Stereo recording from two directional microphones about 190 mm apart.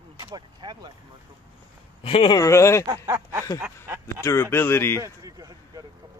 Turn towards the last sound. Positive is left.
turn(degrees=-20)  # may be behind; listen again after turning